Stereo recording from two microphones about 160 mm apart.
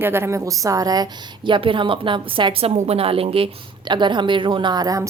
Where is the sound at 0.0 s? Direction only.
15° right (ahead or behind).